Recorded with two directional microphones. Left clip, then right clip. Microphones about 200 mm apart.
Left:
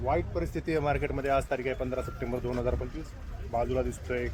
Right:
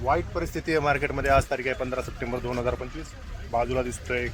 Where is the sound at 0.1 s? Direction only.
10° right (ahead or behind).